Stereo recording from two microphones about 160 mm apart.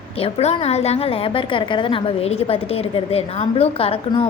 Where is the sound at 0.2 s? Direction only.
40° left (ahead or behind).